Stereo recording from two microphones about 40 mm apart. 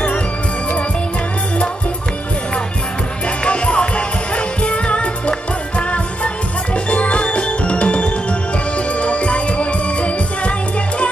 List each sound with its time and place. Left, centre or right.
3.4 s music: left